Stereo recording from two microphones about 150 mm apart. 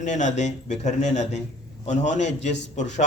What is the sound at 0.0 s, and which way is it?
Speech, 55° left (ahead or behind).